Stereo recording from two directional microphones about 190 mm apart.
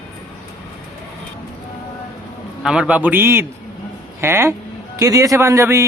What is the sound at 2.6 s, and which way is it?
A man's voice, 5° right (ahead or behind).